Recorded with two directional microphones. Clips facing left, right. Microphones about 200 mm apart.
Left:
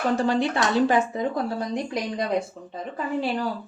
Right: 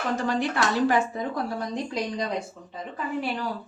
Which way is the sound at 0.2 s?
30° left (ahead or behind).